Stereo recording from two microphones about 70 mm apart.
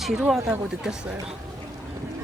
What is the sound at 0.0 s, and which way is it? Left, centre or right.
Speech, centre.